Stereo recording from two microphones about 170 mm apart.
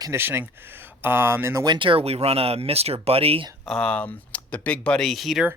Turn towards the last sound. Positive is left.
turn(degrees=0)  # may be behind; listen again after turning